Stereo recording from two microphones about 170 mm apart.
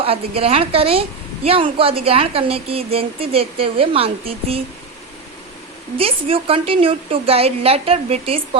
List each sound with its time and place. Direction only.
0.0 s speech: 35° right (ahead or behind)
6.0 s speech: 35° right (ahead or behind)